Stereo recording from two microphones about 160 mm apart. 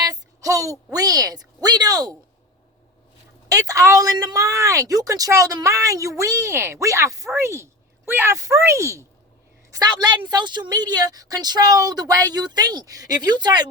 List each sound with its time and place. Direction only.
0.0 s a woman's voice: 20° right (ahead or behind)
3.5 s a woman's voice: 20° right (ahead or behind)